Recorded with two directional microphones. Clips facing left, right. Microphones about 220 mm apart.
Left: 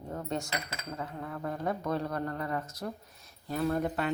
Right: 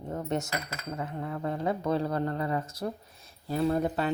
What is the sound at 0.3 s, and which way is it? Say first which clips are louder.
A woman's voice: right 3 dB; 20° right (ahead or behind).